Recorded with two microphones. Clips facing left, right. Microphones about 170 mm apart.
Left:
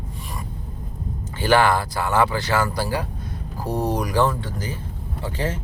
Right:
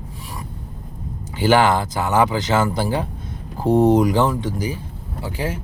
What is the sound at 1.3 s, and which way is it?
Speech, 20° right (ahead or behind).